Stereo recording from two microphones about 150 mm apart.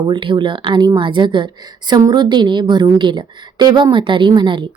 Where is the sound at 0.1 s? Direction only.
35° right (ahead or behind).